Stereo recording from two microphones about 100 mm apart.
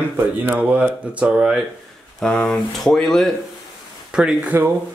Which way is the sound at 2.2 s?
10° left (ahead or behind).